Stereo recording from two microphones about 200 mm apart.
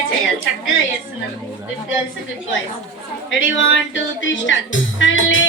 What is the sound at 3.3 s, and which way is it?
Speech, 75° left (ahead or behind).